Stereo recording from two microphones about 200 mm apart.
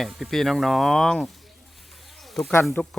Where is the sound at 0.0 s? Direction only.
Centre (ahead or behind).